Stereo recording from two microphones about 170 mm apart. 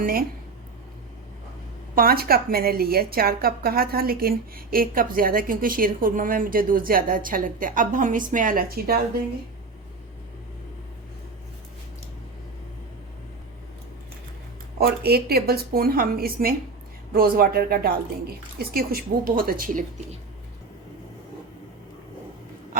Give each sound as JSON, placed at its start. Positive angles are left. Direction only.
{"t": 0.0, "sound": "speech", "side_deg": -60}
{"t": 2.0, "sound": "a woman's voice", "side_deg": -60}
{"t": 14.8, "sound": "a woman's voice", "side_deg": -65}